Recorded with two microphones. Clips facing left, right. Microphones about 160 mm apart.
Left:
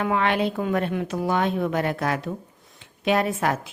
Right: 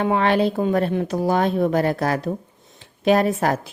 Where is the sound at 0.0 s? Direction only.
35° right (ahead or behind).